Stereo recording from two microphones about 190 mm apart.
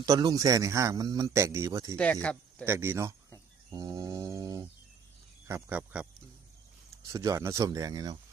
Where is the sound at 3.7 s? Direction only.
20° right (ahead or behind).